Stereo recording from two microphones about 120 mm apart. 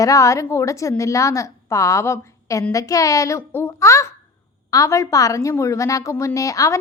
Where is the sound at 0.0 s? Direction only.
25° left (ahead or behind).